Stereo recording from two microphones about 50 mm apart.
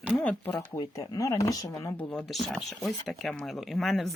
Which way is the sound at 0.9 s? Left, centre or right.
Left.